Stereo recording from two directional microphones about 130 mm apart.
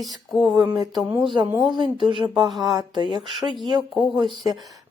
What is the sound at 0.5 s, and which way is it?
Speech, 35° right (ahead or behind).